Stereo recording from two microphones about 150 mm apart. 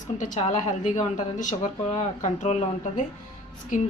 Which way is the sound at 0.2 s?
55° left (ahead or behind).